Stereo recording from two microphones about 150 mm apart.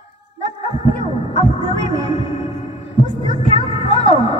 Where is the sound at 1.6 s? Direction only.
30° right (ahead or behind).